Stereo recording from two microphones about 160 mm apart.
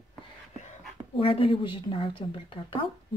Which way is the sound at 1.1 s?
35° left (ahead or behind).